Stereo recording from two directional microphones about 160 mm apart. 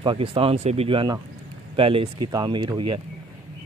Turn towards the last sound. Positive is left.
turn(degrees=-30)  # may be behind; listen again after turning